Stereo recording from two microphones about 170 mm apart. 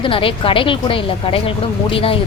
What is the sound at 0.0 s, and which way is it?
Speech, 30° left (ahead or behind).